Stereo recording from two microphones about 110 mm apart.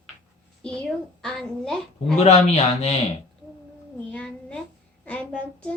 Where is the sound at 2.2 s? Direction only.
80° left.